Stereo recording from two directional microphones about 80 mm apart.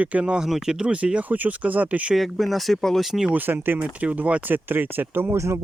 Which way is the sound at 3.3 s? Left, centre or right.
Right.